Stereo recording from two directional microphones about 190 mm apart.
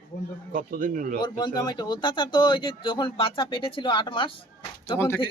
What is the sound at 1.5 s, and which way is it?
Speech, 20° left (ahead or behind).